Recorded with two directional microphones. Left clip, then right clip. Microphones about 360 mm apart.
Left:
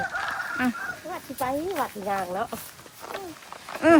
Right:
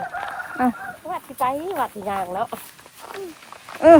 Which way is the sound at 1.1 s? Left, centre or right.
Centre.